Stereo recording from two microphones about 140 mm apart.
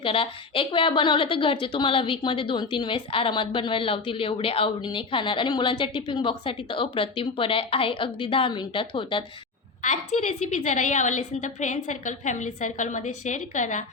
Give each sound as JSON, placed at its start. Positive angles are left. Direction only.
{"t": 0.0, "sound": "a woman's voice", "side_deg": 40}
{"t": 9.8, "sound": "a woman's voice", "side_deg": 55}